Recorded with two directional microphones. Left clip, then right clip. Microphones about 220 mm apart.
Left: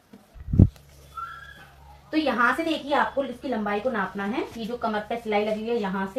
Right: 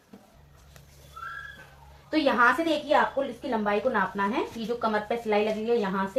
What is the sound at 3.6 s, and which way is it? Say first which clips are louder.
Speech: right 2 dB; 5° left (ahead or behind).